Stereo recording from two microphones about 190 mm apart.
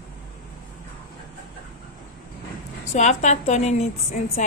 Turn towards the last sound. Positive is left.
turn(degrees=35)  # may be behind; listen again after turning